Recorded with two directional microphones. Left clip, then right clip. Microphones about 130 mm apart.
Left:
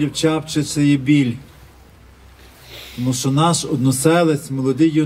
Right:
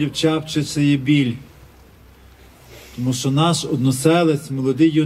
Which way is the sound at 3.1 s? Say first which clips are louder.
Left 2 dB; 15° left (ahead or behind).